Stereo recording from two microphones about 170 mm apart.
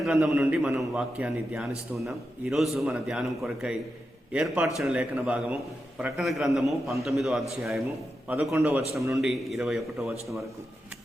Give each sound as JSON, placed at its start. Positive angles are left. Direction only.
{"t": 0.0, "sound": "a man's voice", "side_deg": 0}
{"t": 9.0, "sound": "a man's voice", "side_deg": -20}
{"t": 9.2, "sound": "a man's voice", "side_deg": 0}